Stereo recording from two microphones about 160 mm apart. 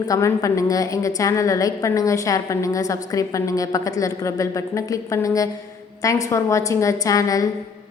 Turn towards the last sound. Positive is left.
turn(degrees=20)  # may be behind; listen again after turning